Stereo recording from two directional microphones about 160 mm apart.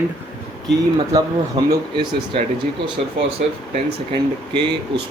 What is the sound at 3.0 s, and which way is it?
Speech, 55° right (ahead or behind).